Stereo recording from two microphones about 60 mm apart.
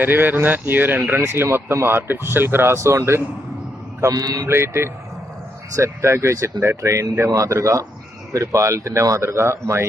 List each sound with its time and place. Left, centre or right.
0.0 s speech: right
1.2 s speech: right
2.7 s speech: right
4.0 s mantra: right
4.4 s speech: right